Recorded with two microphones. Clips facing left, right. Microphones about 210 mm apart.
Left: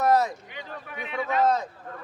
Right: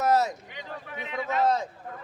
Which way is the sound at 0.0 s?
40° right (ahead or behind).